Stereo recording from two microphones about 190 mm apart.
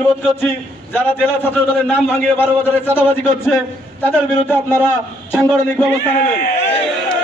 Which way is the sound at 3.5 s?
10° left (ahead or behind).